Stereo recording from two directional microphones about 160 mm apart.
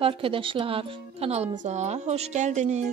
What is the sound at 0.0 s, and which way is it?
A woman's voice, 35° right (ahead or behind).